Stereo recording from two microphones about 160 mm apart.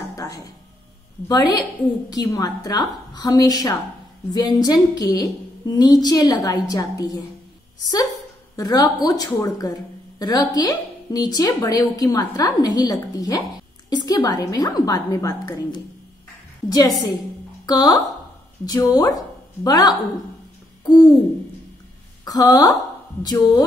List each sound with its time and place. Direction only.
0.1 s a sound: 20° left (ahead or behind)
1.3 s speech: 25° left (ahead or behind)
22.2 s speech: 25° left (ahead or behind)